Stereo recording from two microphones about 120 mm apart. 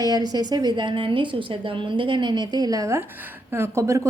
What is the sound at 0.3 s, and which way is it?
A woman's voice, 35° right (ahead or behind).